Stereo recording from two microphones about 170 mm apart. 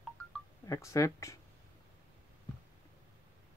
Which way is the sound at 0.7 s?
20° left (ahead or behind).